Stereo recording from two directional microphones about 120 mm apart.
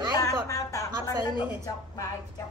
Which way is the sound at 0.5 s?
25° left (ahead or behind).